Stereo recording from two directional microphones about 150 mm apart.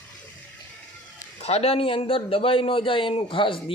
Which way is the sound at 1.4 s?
45° left (ahead or behind).